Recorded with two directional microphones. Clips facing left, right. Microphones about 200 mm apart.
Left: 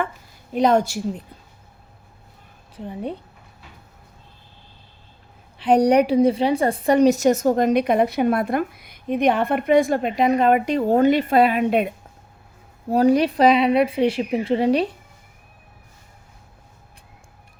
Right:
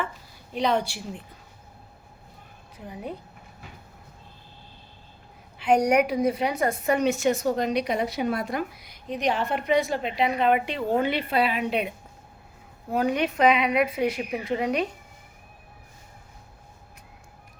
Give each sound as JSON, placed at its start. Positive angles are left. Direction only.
{"t": 0.5, "sound": "a woman's voice", "side_deg": 45}
{"t": 2.7, "sound": "a woman's voice", "side_deg": 30}
{"t": 5.5, "sound": "a woman's voice", "side_deg": 35}
{"t": 12.9, "sound": "a woman's voice", "side_deg": 35}